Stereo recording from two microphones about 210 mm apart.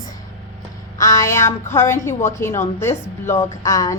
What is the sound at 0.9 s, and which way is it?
A woman's voice, 15° left (ahead or behind).